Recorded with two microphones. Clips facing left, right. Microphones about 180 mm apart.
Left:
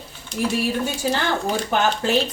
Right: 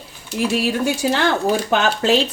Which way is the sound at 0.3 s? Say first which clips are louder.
Right 3 dB; 90° right.